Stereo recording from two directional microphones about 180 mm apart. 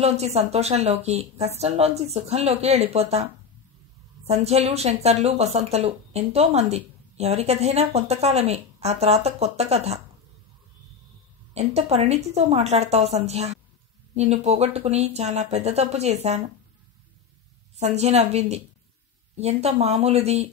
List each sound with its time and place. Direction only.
0.0 s a woman's voice: 35° right (ahead or behind)
11.5 s a woman's voice: 35° right (ahead or behind)
17.7 s a woman's voice: 40° right (ahead or behind)